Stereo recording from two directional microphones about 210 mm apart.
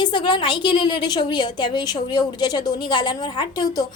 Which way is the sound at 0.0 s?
20° left (ahead or behind).